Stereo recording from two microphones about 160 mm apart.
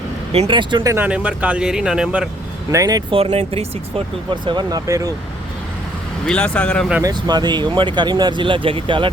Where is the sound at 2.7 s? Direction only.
20° right (ahead or behind).